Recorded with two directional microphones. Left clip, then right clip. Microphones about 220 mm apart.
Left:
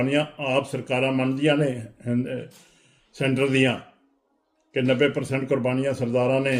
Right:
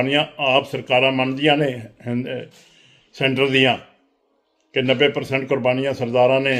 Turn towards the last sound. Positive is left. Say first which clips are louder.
# right 6 dB
turn(degrees=5)  # may be behind; listen again after turning